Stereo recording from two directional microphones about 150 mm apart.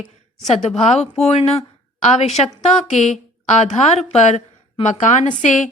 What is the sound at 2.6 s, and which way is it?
A woman's voice, 50° left (ahead or behind).